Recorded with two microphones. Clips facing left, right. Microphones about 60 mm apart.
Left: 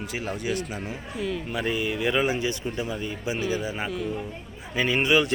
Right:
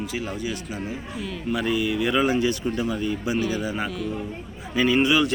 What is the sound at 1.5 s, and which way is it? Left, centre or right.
Speech, left.